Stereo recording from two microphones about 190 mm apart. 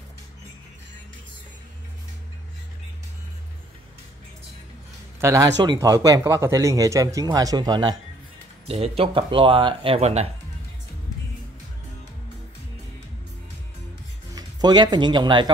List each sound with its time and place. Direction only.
5.2 s speech: 15° right (ahead or behind)
8.6 s speech: 35° right (ahead or behind)
14.3 s speech: 20° right (ahead or behind)